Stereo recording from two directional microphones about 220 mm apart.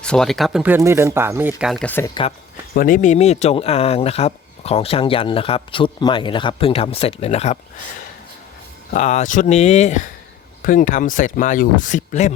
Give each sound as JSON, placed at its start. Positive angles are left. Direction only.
{"t": 0.0, "sound": "speech", "side_deg": 5}
{"t": 2.7, "sound": "speech", "side_deg": 40}
{"t": 8.9, "sound": "speech", "side_deg": 30}